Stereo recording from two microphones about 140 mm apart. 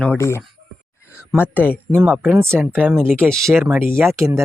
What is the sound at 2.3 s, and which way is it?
Speech, 20° right (ahead or behind).